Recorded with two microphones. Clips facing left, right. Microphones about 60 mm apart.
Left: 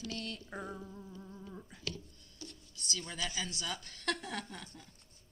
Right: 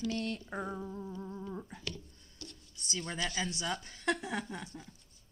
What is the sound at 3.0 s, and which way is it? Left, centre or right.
Speech, right.